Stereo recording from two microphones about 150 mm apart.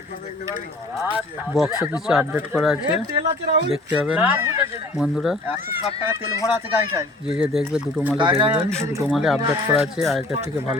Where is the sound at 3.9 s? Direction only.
10° right (ahead or behind).